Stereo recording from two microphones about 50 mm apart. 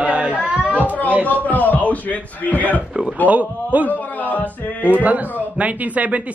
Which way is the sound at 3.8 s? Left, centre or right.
Left.